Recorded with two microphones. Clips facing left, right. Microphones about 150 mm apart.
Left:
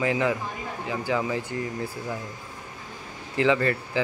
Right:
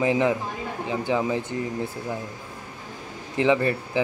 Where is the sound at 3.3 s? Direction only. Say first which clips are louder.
Right 1 dB; 20° right (ahead or behind).